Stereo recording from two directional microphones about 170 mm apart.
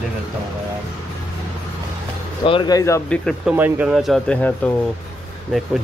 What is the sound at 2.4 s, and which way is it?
Speech, 30° left (ahead or behind).